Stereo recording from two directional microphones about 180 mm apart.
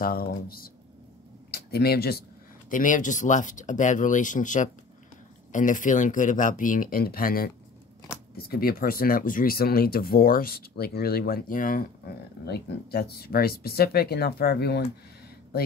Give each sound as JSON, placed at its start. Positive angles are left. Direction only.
{"t": 0.0, "sound": "speech", "side_deg": 55}
{"t": 2.7, "sound": "speech", "side_deg": 45}